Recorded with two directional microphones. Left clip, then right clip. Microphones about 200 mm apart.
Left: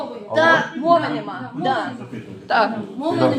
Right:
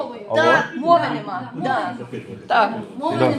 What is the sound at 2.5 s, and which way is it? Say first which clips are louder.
Speech: right 1 dB; 5° right (ahead or behind).